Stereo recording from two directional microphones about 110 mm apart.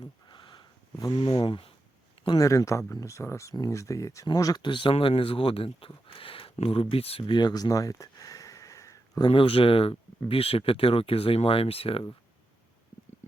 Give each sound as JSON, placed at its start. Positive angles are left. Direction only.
{"t": 0.0, "sound": "a sound", "side_deg": 45}
{"t": 2.4, "sound": "speech", "side_deg": 30}
{"t": 9.3, "sound": "speech", "side_deg": 55}